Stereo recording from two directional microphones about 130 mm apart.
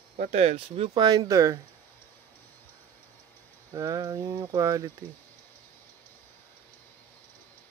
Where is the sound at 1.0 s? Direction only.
30° right (ahead or behind).